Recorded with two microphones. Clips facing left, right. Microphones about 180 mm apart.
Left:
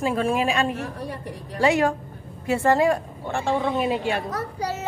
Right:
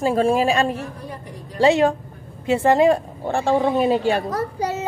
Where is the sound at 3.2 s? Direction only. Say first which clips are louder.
Right 5 dB; 35° right (ahead or behind).